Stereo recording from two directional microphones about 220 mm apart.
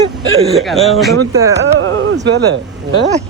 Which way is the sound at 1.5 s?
55° right (ahead or behind).